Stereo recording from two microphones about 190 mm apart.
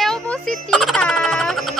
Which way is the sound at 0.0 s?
Centre (ahead or behind).